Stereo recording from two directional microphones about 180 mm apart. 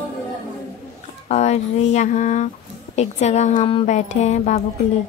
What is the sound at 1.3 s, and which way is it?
Speech, 40° left (ahead or behind).